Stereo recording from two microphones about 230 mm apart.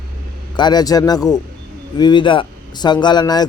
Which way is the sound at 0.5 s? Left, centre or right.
Centre.